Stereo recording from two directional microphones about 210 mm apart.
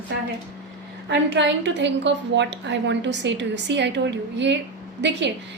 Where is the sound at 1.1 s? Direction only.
55° right (ahead or behind).